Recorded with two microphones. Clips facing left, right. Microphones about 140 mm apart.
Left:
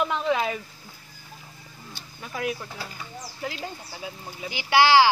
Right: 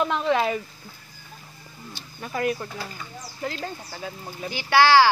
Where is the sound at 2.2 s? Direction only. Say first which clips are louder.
Right 4 dB; centre (ahead or behind).